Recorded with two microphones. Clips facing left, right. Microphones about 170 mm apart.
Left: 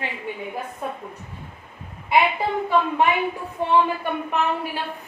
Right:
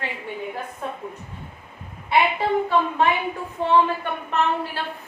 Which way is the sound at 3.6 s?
15° left (ahead or behind).